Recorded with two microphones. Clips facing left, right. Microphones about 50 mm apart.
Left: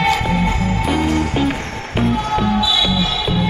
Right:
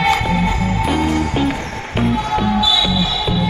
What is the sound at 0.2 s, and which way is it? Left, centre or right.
Music, centre.